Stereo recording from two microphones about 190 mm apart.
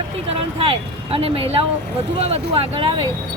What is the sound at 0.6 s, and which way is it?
Speech, 30° right (ahead or behind).